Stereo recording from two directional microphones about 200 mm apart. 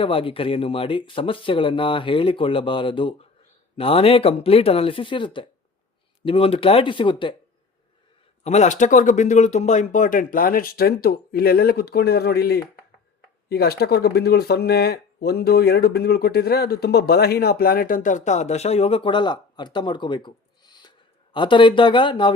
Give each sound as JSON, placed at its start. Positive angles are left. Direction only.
{"t": 0.0, "sound": "speech", "side_deg": 25}
{"t": 8.4, "sound": "speech", "side_deg": 35}